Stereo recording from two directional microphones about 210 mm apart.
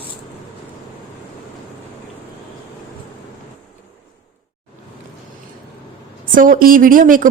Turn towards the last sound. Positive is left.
turn(degrees=-40)  # may be behind; listen again after turning